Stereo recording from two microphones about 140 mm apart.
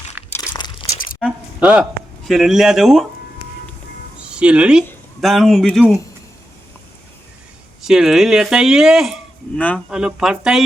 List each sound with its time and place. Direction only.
0.5 s crunch: 30° left (ahead or behind)
1.6 s speech: 5° right (ahead or behind)
4.3 s speech: 5° right (ahead or behind)
7.8 s speech: 5° right (ahead or behind)
9.6 s speech: 10° left (ahead or behind)
9.9 s speech: 5° right (ahead or behind)